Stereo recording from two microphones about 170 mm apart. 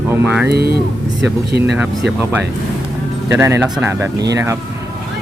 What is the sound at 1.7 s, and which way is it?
Speech, 5° right (ahead or behind).